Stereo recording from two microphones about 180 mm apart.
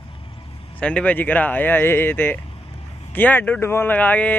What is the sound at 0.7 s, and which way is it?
Speech, 5° left (ahead or behind).